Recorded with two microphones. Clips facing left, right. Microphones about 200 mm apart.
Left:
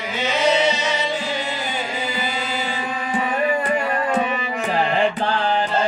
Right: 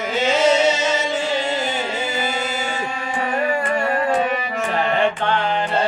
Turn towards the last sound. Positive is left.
turn(degrees=35)  # may be behind; listen again after turning